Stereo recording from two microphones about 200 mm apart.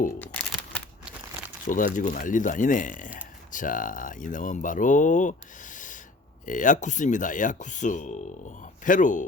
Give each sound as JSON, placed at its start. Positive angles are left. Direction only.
{"t": 1.6, "sound": "speech", "side_deg": 40}
{"t": 5.7, "sound": "a sound", "side_deg": 40}
{"t": 6.4, "sound": "speech", "side_deg": 40}